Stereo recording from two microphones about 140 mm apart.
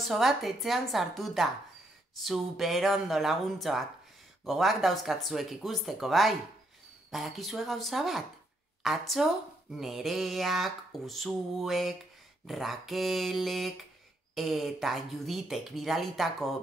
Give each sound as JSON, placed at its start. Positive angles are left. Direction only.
{"t": 0.0, "sound": "speech", "side_deg": 0}